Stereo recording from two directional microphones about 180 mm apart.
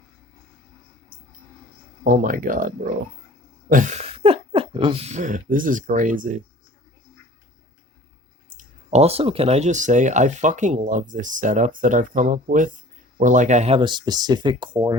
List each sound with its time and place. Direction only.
2.0 s speech: 50° right (ahead or behind)
8.5 s speech: 35° right (ahead or behind)